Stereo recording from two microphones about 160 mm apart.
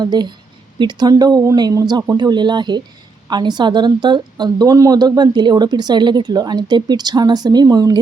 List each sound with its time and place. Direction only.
0.0 s a woman's voice: 25° right (ahead or behind)